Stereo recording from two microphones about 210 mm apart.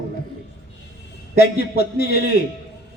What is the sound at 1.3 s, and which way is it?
Speech, 50° left (ahead or behind).